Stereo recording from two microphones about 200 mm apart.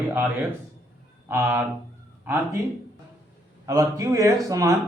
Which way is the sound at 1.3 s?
10° right (ahead or behind).